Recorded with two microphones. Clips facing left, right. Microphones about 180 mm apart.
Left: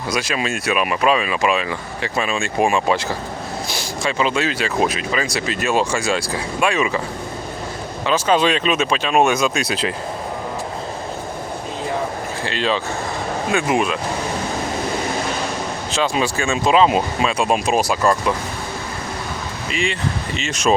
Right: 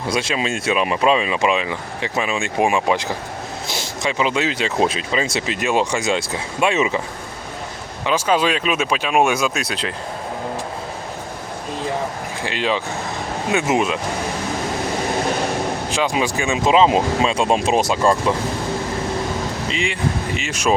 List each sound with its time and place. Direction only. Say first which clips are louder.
0.1 s speech: right 1 dB; 25° right (ahead or behind)
8.0 s speech: left 1 dB; 10° right (ahead or behind)
12.5 s speech: even; 15° right (ahead or behind)
15.9 s speech: left 3 dB; 15° right (ahead or behind)
19.6 s speech: left 3 dB; 20° right (ahead or behind)